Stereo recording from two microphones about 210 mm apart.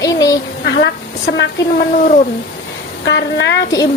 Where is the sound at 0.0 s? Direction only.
15° left (ahead or behind).